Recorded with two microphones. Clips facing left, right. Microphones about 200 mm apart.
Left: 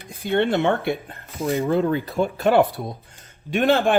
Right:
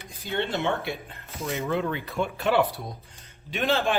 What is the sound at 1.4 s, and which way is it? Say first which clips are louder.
Speech: left 7 dB; 45° left (ahead or behind).